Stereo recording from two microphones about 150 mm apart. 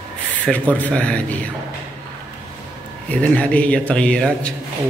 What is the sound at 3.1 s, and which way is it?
Speech, 10° left (ahead or behind).